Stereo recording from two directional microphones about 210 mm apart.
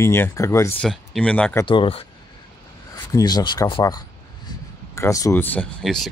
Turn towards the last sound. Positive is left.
turn(degrees=0)  # may be behind; listen again after turning